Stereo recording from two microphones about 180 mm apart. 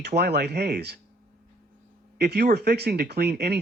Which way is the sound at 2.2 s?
60° right (ahead or behind).